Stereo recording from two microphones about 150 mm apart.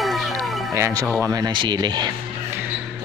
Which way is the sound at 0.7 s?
20° right (ahead or behind).